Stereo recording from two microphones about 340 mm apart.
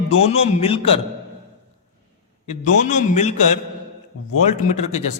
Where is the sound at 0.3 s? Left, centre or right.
Centre.